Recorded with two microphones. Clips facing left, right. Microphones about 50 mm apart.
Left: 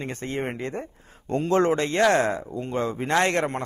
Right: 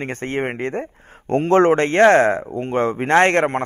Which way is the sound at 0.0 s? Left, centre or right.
Right.